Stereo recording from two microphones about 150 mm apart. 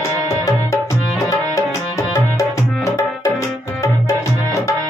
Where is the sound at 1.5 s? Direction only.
20° left (ahead or behind).